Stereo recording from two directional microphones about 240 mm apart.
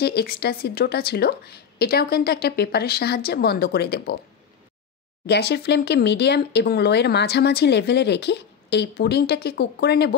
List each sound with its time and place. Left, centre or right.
0.0 s a woman's voice: left
5.2 s speech: left